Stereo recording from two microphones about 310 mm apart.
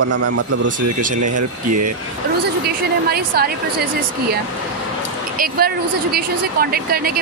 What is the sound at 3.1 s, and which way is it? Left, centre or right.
Speech, right.